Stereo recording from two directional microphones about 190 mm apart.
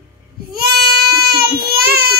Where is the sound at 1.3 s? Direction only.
50° right (ahead or behind).